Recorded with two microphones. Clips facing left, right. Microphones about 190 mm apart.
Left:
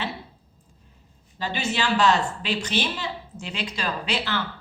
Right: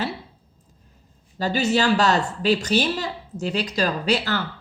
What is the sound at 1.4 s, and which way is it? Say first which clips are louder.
A woman's voice: right 6 dB; 40° right (ahead or behind).